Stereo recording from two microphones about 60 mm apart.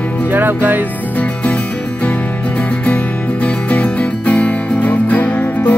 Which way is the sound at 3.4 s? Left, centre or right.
Left.